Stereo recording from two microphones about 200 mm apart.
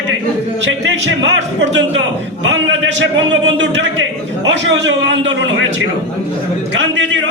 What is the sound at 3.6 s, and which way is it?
A man's voice, 65° right (ahead or behind).